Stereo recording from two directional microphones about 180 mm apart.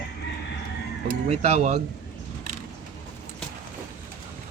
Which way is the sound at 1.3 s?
40° right (ahead or behind).